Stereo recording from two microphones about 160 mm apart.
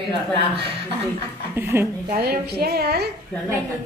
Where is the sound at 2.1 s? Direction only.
75° right (ahead or behind).